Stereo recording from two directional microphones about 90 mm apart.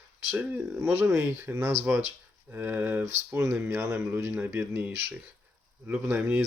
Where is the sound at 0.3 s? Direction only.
20° right (ahead or behind).